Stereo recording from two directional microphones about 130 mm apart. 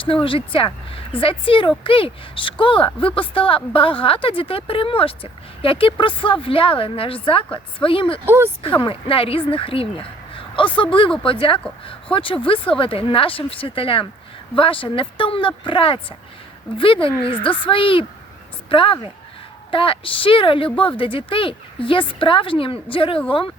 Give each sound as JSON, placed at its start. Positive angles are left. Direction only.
{"t": 0.0, "sound": "a woman's voice", "side_deg": 40}
{"t": 8.2, "sound": "a woman's voice", "side_deg": -15}
{"t": 8.6, "sound": "a woman's voice", "side_deg": 40}